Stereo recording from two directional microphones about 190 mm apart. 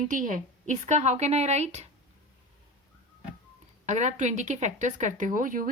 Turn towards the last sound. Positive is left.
turn(degrees=-45)  # may be behind; listen again after turning